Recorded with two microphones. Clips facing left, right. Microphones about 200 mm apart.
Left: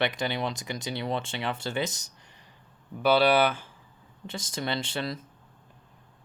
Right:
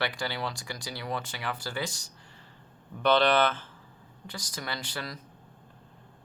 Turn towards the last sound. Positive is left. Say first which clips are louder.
# left 6 dB
turn(degrees=25)  # may be behind; listen again after turning